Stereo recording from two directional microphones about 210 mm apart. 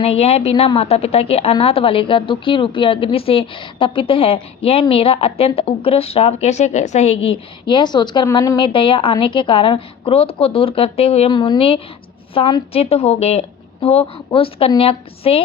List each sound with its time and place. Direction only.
0.0 s a woman's voice: 30° left (ahead or behind)